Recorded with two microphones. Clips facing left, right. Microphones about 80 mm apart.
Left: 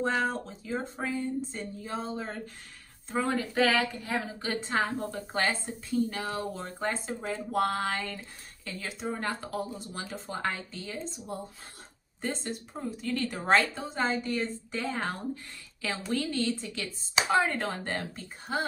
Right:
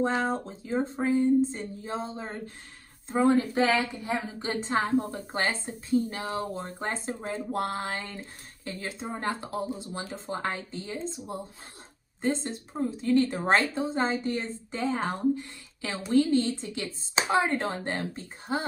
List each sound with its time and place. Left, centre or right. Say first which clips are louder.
0.0 s speech: right 2 dB; right